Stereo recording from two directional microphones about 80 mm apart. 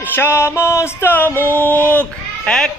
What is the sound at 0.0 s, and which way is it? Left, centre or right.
Music, left.